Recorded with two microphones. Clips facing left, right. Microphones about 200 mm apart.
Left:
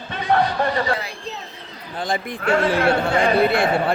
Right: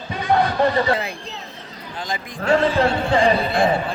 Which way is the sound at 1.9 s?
55° left (ahead or behind).